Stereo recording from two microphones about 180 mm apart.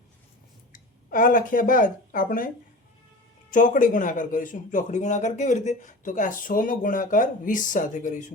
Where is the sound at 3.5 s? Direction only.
45° left (ahead or behind).